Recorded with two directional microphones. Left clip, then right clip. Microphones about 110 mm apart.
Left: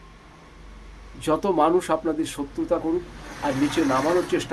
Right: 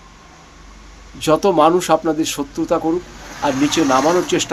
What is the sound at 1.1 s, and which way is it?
Speech, 15° right (ahead or behind).